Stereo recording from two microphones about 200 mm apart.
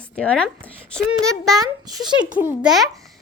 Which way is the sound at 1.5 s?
20° right (ahead or behind).